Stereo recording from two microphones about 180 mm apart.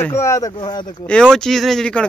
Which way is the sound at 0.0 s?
15° left (ahead or behind).